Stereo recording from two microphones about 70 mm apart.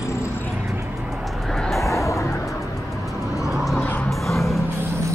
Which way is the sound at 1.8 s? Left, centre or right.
Left.